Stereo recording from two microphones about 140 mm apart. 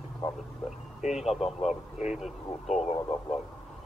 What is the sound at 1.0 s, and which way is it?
Speech, 55° left (ahead or behind).